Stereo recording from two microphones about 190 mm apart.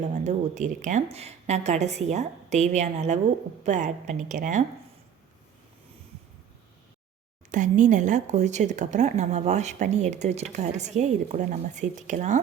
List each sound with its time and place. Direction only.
0.0 s a woman's voice: 40° right (ahead or behind)
7.5 s a woman's voice: 40° right (ahead or behind)